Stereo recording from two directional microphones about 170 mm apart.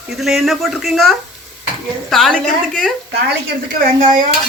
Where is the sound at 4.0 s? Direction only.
25° right (ahead or behind).